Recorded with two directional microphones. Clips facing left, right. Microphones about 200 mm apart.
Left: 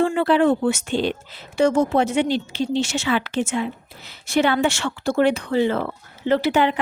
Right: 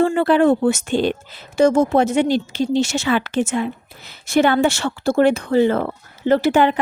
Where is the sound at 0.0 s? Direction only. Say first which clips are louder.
Right 3 dB; 45° right (ahead or behind).